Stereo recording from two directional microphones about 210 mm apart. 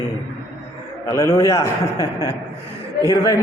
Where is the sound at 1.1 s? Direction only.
15° left (ahead or behind).